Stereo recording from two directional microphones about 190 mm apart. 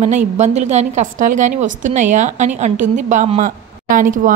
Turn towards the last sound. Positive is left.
turn(degrees=-45)  # may be behind; listen again after turning